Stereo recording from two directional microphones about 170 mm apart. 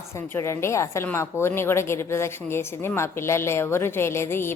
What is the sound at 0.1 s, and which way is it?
A woman's voice, 15° left (ahead or behind).